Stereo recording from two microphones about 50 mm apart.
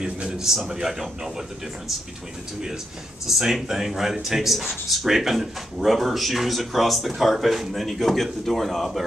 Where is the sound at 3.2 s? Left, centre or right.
Centre.